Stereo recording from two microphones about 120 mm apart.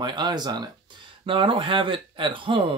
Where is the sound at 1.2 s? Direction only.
45° right (ahead or behind).